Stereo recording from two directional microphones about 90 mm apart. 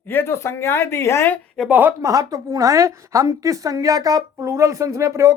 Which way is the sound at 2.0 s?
40° right (ahead or behind).